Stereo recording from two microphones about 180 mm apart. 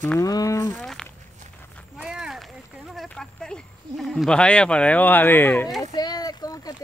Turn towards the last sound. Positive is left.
turn(degrees=20)  # may be behind; listen again after turning